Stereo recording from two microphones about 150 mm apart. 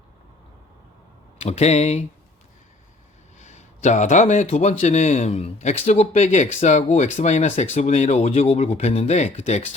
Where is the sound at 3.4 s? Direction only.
50° left (ahead or behind).